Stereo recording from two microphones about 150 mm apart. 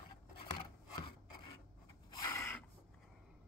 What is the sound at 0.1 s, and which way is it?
Scissors, 30° left (ahead or behind).